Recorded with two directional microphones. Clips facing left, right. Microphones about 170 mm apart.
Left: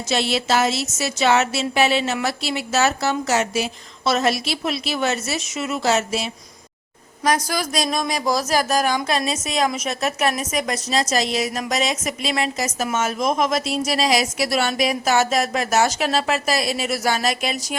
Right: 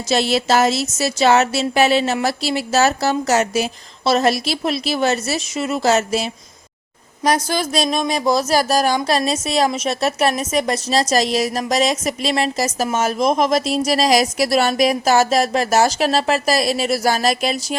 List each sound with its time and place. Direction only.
0.1 s speech: 40° right (ahead or behind)
7.3 s speech: 30° right (ahead or behind)